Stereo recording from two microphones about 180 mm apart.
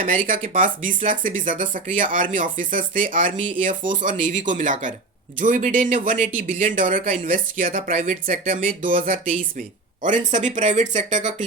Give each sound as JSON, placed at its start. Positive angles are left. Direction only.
{"t": 0.3, "sound": "speech", "side_deg": -50}